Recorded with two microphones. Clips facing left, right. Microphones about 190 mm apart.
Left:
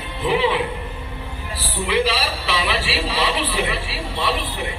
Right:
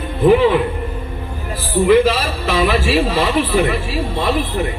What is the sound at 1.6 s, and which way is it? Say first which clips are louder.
A man's voice: right 9 dB; 50° right (ahead or behind).